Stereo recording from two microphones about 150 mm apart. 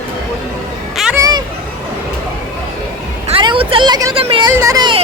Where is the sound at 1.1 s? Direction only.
25° right (ahead or behind).